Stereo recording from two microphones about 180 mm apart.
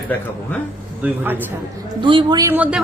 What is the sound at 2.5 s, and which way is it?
Speech, 10° right (ahead or behind).